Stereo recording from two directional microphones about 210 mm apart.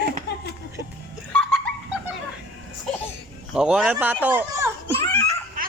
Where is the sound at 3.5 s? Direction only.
5° right (ahead or behind).